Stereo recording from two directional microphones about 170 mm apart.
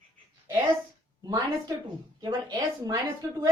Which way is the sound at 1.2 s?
20° right (ahead or behind).